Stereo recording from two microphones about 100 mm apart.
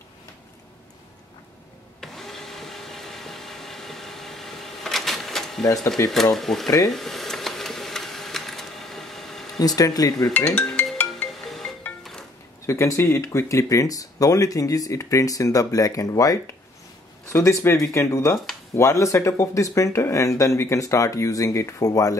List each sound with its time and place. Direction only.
2.0 s vacuum cleaner: 5° left (ahead or behind)
6.0 s speech: 30° left (ahead or behind)
6.3 s speech: centre (ahead or behind)
6.9 s sewing machine: 5° left (ahead or behind)
9.6 s speech: 40° left (ahead or behind)
10.3 s speech: 20° left (ahead or behind)
11.2 s music: centre (ahead or behind)
12.6 s speech: 30° left (ahead or behind)